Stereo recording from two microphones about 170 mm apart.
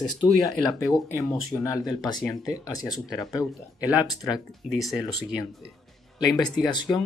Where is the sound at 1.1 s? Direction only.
20° left (ahead or behind).